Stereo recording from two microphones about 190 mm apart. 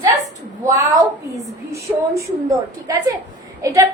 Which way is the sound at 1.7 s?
15° right (ahead or behind).